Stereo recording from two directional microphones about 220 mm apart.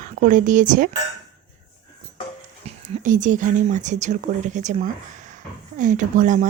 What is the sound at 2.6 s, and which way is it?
Speech, 30° right (ahead or behind).